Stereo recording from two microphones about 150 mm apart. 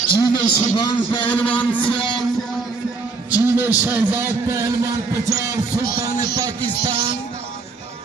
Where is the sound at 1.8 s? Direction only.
35° left (ahead or behind).